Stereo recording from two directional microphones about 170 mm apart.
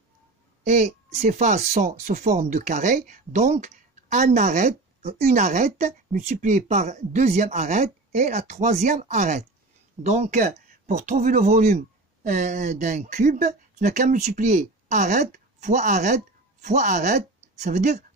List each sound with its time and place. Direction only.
0.7 s speech: 40° right (ahead or behind)